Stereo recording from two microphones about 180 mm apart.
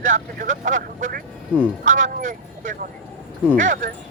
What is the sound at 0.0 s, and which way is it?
Speech, 45° right (ahead or behind).